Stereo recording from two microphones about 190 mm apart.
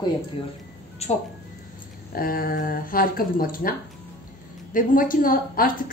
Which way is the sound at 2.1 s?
50° left (ahead or behind).